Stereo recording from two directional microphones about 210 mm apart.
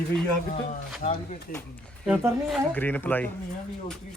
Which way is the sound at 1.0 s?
35° left (ahead or behind).